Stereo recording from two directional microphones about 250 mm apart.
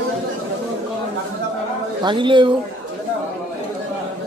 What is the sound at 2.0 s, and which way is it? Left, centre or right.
Speech, centre.